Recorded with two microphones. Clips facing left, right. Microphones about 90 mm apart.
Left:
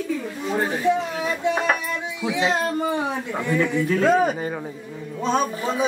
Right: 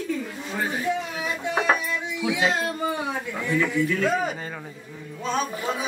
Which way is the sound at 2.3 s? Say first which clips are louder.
Left 1 dB; 25° left (ahead or behind).